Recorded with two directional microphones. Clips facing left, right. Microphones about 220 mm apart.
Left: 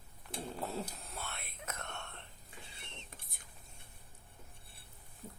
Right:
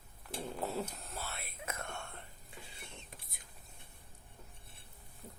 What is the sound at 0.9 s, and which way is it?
Whispering, centre (ahead or behind).